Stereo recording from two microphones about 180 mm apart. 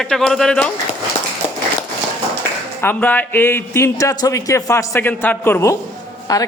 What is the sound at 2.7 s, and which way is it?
A man's voice, 10° left (ahead or behind).